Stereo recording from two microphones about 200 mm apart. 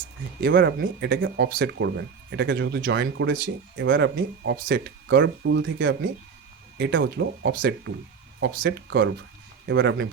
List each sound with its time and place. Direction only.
0.4 s speech: 55° right (ahead or behind)